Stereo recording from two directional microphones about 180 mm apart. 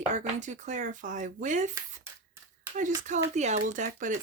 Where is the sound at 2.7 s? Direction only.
45° right (ahead or behind).